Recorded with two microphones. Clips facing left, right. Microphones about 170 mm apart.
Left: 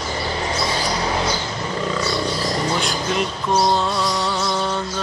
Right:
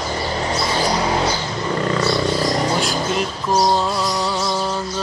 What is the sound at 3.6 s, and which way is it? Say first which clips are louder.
Music: right 1 dB; centre (ahead or behind).